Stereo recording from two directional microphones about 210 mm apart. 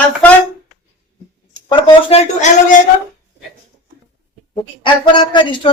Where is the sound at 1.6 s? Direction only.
25° left (ahead or behind).